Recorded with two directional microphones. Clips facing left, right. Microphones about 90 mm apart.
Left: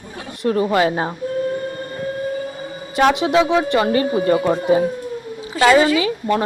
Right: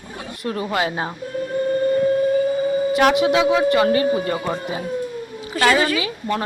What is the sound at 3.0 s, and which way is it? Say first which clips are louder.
Speech: left 3 dB; 25° left (ahead or behind).